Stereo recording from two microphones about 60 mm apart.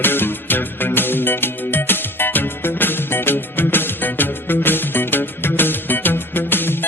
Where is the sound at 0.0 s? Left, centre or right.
Left.